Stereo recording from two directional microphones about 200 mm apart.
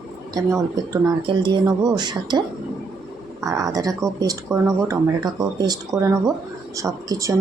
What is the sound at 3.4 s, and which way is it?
Speech, 15° right (ahead or behind).